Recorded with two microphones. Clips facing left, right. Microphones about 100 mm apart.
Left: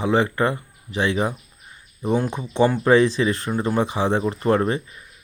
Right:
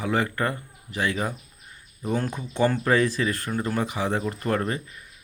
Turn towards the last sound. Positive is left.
turn(degrees=25)  # may be behind; listen again after turning